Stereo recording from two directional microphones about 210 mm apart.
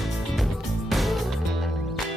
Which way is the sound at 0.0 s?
Centre (ahead or behind).